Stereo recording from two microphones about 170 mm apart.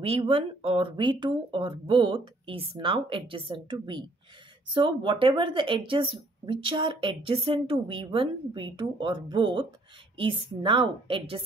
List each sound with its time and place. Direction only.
0.0 s a woman's voice: 35° right (ahead or behind)